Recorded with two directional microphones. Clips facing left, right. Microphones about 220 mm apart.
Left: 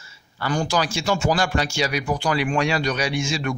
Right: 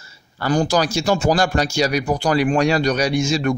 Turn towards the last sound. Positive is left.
turn(degrees=-40)  # may be behind; listen again after turning